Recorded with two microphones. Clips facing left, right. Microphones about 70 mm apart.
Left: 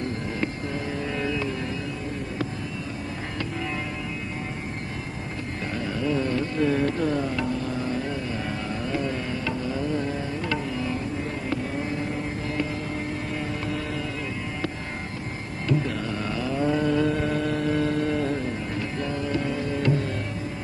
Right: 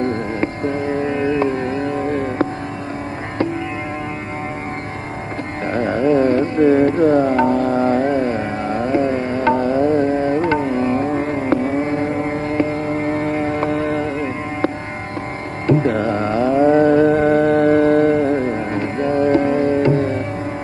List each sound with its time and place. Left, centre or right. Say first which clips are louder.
0.0 s music: right 9 dB; right
5.7 s music: right 12 dB; right
9.5 s music: right 14 dB; right
11.1 s carnatic music: right 11 dB; right
15.6 s music: right 11 dB; right